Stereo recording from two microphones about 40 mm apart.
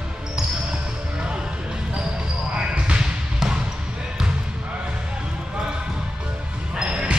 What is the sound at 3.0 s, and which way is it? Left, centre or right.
Basketball bounce, centre.